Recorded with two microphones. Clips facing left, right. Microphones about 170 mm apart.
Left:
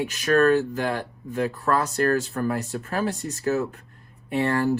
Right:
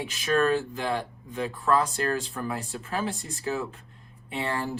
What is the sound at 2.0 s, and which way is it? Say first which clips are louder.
Speech: left 6 dB; 50° left (ahead or behind).